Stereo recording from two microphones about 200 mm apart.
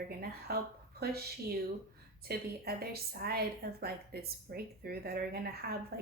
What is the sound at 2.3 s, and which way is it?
A woman's voice, 50° right (ahead or behind).